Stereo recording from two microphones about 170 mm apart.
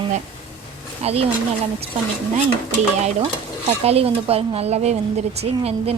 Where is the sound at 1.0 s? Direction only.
35° right (ahead or behind).